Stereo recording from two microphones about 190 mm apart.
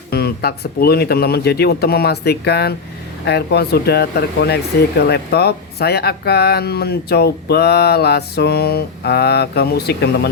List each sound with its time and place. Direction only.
0.1 s speech: 55° left (ahead or behind)